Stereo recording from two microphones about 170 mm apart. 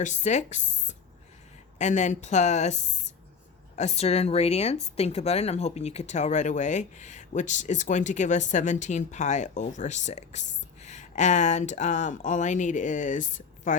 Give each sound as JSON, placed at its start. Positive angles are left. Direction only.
{"t": 0.0, "sound": "speech", "side_deg": 45}
{"t": 3.8, "sound": "speech", "side_deg": 40}